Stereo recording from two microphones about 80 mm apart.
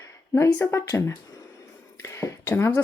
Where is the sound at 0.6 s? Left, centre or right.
Left.